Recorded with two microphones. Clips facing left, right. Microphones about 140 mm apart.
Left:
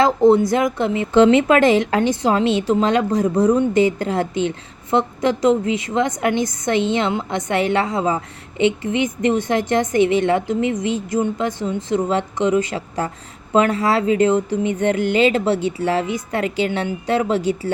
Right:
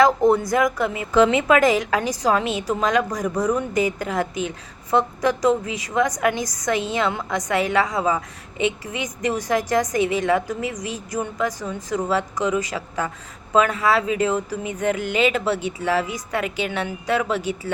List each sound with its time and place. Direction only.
0.0 s speech: 25° left (ahead or behind)